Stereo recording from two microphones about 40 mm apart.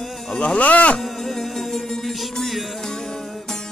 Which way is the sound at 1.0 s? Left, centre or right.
Centre.